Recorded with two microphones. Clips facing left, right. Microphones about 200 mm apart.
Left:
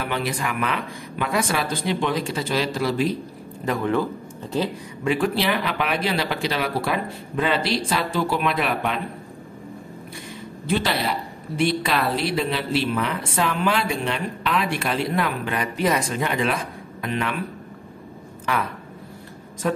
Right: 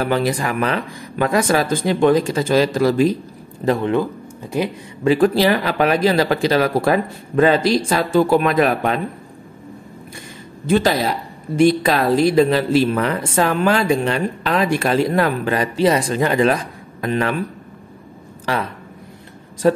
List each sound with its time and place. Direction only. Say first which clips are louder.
0.0 s speech: right 7 dB; 40° right (ahead or behind)
3.6 s speech: right 5 dB; 25° right (ahead or behind)
5.0 s speech: right 8 dB; 35° right (ahead or behind)
10.7 s speech: right 7 dB; 45° right (ahead or behind)
18.4 s speech: right 3 dB; 35° right (ahead or behind)